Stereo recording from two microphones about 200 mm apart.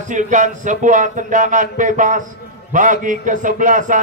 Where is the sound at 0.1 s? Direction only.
40° right (ahead or behind).